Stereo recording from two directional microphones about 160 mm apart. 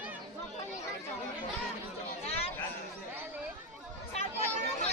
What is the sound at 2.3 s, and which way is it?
Chatter, 40° left (ahead or behind).